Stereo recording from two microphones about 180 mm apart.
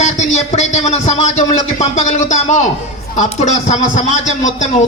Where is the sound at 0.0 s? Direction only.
40° left (ahead or behind).